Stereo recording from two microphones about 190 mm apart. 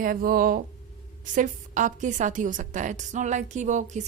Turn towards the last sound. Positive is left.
turn(degrees=-40)  # may be behind; listen again after turning